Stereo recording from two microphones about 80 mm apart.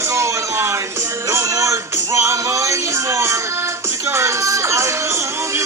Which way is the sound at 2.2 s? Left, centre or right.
Right.